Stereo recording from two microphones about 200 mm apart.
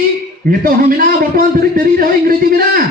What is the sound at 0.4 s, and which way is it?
A man's voice, 45° right (ahead or behind).